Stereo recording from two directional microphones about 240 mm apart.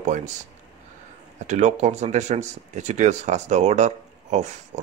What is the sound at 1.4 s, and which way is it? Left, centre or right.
Speech, right.